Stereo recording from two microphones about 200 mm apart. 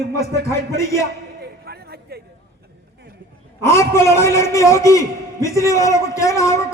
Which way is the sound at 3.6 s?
15° left (ahead or behind).